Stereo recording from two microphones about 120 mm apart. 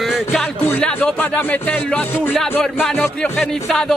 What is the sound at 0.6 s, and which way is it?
Music, 15° left (ahead or behind).